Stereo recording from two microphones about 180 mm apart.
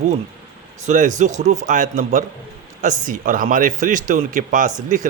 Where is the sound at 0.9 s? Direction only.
45° right (ahead or behind).